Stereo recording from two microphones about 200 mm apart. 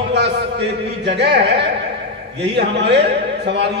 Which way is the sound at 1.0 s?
55° right (ahead or behind).